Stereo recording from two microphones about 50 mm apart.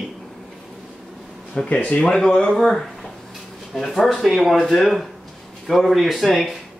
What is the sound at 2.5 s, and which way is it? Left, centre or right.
Speech, centre.